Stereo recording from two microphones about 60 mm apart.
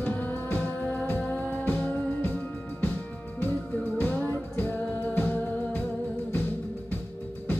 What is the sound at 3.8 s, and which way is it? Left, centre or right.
Music, left.